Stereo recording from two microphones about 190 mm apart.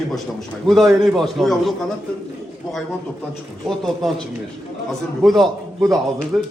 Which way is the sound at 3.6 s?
Centre (ahead or behind).